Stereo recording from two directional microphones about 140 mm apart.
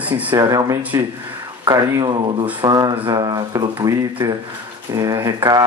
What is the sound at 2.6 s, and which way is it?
Speech, 35° right (ahead or behind).